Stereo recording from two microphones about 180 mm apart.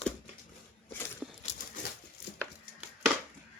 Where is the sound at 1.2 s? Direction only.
5° right (ahead or behind).